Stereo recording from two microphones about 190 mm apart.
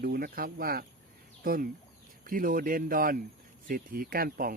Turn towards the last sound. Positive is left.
turn(degrees=-50)  # may be behind; listen again after turning